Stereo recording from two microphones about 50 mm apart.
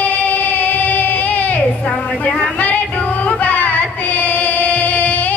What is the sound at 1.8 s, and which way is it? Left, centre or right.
Music, left.